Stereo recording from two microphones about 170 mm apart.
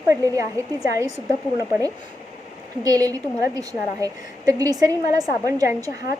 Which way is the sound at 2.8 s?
20° right (ahead or behind).